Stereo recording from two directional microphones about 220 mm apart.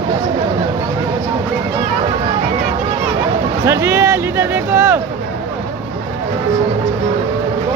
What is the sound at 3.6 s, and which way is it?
Speech, 10° right (ahead or behind).